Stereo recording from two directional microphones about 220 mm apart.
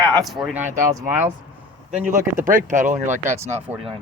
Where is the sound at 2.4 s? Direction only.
35° right (ahead or behind).